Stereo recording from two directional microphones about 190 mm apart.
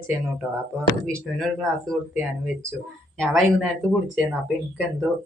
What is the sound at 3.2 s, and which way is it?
Speech, centre (ahead or behind).